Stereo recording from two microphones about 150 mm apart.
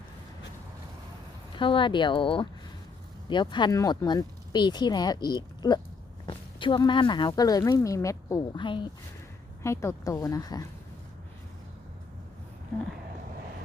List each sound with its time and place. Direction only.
1.5 s speech: 35° left (ahead or behind)
9.6 s speech: 20° left (ahead or behind)